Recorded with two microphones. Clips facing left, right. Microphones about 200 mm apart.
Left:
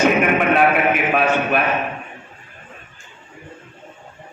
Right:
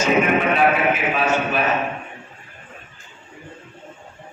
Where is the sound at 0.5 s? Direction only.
55° left (ahead or behind).